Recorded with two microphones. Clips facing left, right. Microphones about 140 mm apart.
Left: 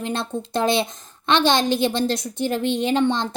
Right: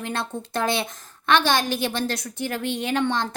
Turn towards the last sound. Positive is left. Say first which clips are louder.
# left 4 dB
turn(degrees=20)  # may be behind; listen again after turning